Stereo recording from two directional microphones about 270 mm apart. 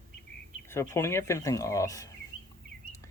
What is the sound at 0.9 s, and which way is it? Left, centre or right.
Speech, centre.